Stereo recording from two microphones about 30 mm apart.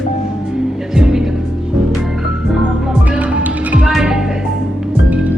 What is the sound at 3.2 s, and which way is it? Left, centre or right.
Music, right.